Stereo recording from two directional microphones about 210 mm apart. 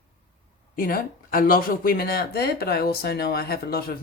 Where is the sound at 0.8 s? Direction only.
45° left (ahead or behind).